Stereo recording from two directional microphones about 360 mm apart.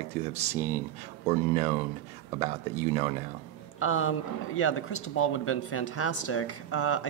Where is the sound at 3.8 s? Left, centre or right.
Left.